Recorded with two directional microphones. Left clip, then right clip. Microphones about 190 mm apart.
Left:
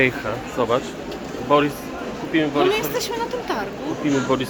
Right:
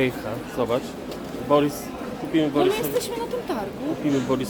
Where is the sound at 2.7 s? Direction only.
65° right (ahead or behind).